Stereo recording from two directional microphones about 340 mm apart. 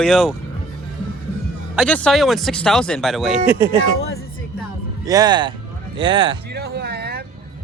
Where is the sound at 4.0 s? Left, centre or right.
Left.